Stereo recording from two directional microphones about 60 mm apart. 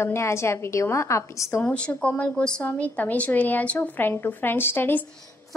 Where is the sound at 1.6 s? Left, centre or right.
Centre.